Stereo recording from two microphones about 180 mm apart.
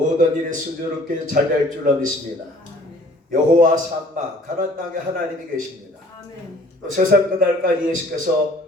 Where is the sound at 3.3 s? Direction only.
50° right (ahead or behind).